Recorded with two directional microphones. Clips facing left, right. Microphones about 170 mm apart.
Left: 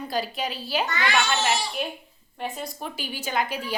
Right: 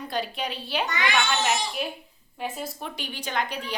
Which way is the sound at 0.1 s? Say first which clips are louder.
Left 1 dB; centre (ahead or behind).